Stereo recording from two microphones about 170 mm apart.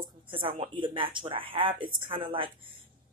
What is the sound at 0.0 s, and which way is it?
Speech, 30° right (ahead or behind).